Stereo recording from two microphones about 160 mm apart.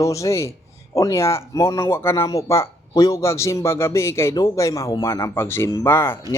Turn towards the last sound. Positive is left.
turn(degrees=15)  # may be behind; listen again after turning